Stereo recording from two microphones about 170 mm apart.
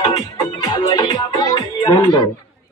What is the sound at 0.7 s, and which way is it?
Music, 20° left (ahead or behind).